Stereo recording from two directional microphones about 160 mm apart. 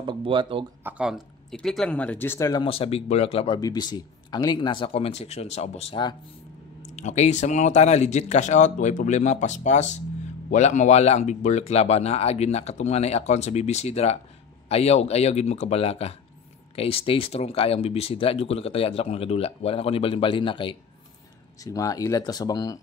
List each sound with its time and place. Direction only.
0.0 s speech: 30° right (ahead or behind)
0.8 s speech: 5° right (ahead or behind); by 2.5 s 15° left (ahead or behind)
2.5 s speech: 35° left (ahead or behind)
3.5 s speech: 25° left (ahead or behind)